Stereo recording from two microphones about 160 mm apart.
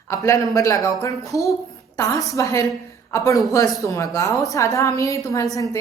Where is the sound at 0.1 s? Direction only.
20° left (ahead or behind).